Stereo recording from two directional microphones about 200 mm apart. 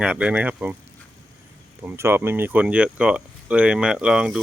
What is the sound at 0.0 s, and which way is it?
Speech, 5° right (ahead or behind).